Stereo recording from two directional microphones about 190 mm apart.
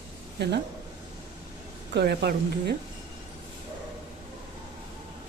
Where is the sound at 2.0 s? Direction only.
60° right (ahead or behind).